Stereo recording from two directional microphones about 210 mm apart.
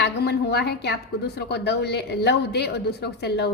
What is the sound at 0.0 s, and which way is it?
A woman's voice, 50° left (ahead or behind).